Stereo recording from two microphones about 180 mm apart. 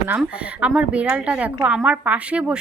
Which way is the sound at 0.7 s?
5° right (ahead or behind).